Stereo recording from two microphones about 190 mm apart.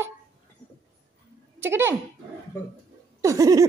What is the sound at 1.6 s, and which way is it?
Speech, 10° right (ahead or behind).